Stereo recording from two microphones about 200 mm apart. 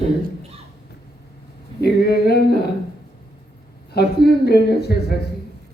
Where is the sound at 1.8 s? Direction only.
55° left (ahead or behind).